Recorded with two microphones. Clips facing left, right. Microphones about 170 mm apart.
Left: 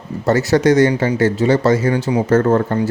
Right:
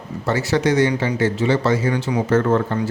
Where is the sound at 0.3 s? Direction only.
45° left (ahead or behind).